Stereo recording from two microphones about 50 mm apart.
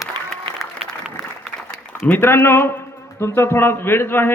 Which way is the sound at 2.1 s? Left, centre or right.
Left.